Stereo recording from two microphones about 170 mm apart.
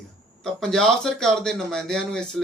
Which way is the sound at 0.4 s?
5° left (ahead or behind).